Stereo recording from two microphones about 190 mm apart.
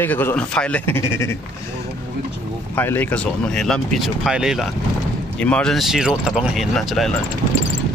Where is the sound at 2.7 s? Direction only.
10° left (ahead or behind).